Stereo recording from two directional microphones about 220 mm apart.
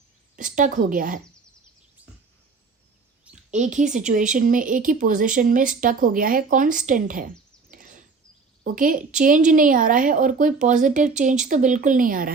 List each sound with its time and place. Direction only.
0.3 s speech: 35° right (ahead or behind)
3.5 s speech: 35° right (ahead or behind)
7.7 s a sound: 35° right (ahead or behind)
8.6 s speech: 40° right (ahead or behind)